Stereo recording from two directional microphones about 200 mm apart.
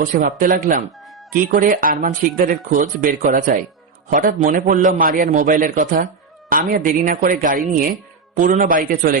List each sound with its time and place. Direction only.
0.0 s speech: 40° right (ahead or behind)